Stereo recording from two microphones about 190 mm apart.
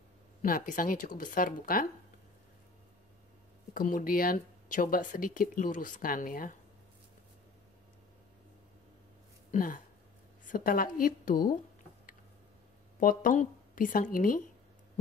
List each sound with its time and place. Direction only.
0.4 s speech: 45° left (ahead or behind)
3.7 s speech: 45° left (ahead or behind)
9.5 s speech: 45° left (ahead or behind)
13.0 s speech: 45° left (ahead or behind)